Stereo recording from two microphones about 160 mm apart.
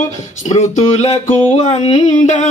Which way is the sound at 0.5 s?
45° left (ahead or behind).